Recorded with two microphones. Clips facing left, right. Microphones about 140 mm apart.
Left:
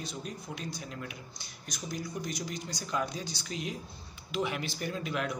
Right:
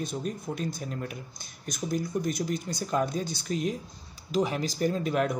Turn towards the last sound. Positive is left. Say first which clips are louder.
# right 7 dB
turn(degrees=-45)  # may be behind; listen again after turning